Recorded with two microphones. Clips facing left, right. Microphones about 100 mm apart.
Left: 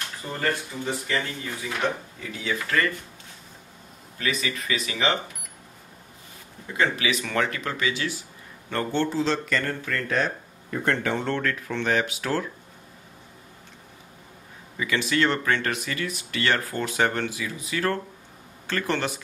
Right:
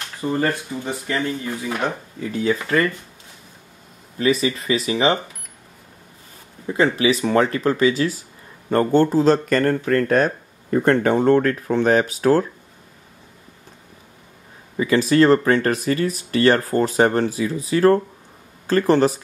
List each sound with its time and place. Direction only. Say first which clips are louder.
0.2 s speech: right 7 dB; 40° right (ahead or behind)
4.2 s speech: right 9 dB; 30° right (ahead or behind)
6.7 s speech: right 7 dB; 30° right (ahead or behind)
14.8 s speech: right 9 dB; 35° right (ahead or behind)